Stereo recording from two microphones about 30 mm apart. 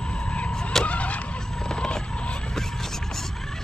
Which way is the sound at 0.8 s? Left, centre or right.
Left.